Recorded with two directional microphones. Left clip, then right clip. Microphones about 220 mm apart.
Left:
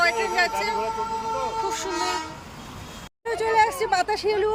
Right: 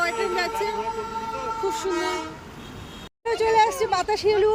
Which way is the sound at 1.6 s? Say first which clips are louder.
Right 1 dB; 5° right (ahead or behind).